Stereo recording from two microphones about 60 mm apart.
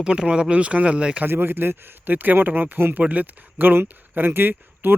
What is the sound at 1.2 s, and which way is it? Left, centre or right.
Speech, right.